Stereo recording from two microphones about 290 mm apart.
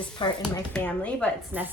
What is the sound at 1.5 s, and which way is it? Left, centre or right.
Speech, centre.